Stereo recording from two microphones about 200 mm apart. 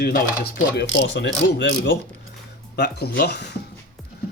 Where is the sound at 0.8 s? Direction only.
65° left (ahead or behind).